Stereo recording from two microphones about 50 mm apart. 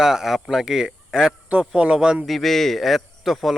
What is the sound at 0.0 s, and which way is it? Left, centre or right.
Speech, centre.